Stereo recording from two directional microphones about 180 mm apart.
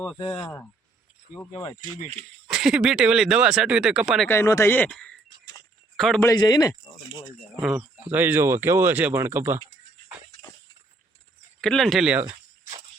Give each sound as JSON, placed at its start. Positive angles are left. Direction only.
{"t": 0.2, "sound": "speech", "side_deg": 30}
{"t": 2.5, "sound": "speech", "side_deg": 0}
{"t": 4.3, "sound": "speech", "side_deg": 15}
{"t": 6.2, "sound": "speech", "side_deg": 20}
{"t": 7.6, "sound": "speech", "side_deg": -5}
{"t": 11.6, "sound": "speech", "side_deg": 0}
{"t": 12.2, "sound": "a sound", "side_deg": -20}